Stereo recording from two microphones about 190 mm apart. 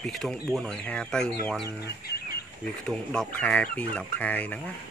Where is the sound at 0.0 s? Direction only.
Centre (ahead or behind).